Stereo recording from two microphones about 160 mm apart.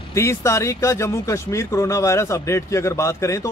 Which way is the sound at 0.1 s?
15° left (ahead or behind).